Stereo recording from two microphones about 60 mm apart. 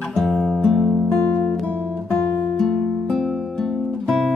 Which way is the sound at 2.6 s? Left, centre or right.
Centre.